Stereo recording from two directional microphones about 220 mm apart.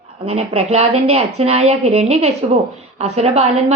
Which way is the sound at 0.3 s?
30° right (ahead or behind).